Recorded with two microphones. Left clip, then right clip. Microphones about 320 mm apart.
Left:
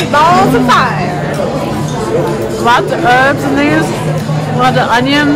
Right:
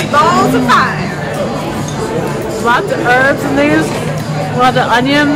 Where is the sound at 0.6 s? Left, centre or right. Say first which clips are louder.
Left 1 dB; left.